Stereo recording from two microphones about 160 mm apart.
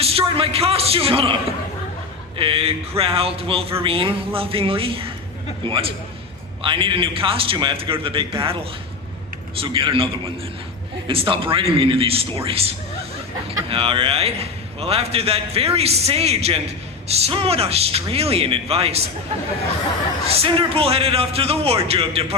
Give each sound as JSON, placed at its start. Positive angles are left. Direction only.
{"t": 0.0, "sound": "a man's voice", "side_deg": -35}
{"t": 9.6, "sound": "a man's voice", "side_deg": -35}
{"t": 20.3, "sound": "a man's voice", "side_deg": -35}